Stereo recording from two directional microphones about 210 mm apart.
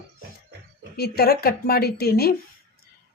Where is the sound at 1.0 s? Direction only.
50° left (ahead or behind).